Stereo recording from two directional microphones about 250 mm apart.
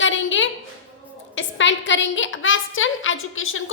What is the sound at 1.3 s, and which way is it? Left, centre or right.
A woman's voice, left.